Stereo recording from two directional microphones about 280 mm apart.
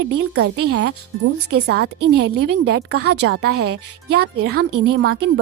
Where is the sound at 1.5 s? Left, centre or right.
Right.